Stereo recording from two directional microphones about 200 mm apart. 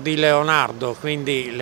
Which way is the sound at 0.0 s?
10° right (ahead or behind).